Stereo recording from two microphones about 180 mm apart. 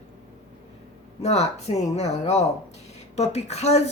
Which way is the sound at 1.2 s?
35° left (ahead or behind).